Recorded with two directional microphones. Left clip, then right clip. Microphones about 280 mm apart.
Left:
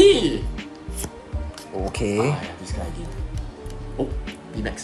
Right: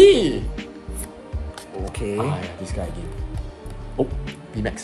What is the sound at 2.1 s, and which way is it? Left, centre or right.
Speech, centre.